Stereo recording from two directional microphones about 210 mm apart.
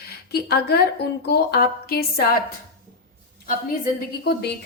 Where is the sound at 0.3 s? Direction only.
50° left (ahead or behind).